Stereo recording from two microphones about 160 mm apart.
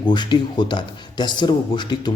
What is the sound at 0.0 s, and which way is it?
Speech, 30° left (ahead or behind).